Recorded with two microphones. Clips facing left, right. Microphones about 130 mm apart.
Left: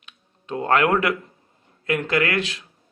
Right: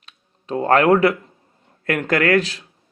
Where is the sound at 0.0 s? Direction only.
35° right (ahead or behind).